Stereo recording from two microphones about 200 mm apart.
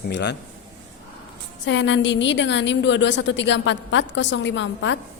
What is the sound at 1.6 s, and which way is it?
Speech, 65° left (ahead or behind).